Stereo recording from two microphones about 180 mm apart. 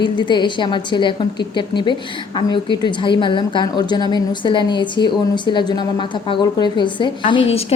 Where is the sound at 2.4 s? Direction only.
25° left (ahead or behind).